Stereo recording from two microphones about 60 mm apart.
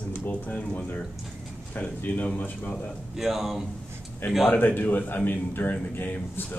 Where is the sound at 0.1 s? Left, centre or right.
Left.